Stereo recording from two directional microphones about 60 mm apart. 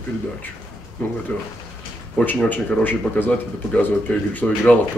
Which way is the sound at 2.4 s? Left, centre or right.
Left.